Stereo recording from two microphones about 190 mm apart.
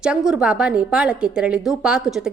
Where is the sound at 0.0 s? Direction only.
5° right (ahead or behind).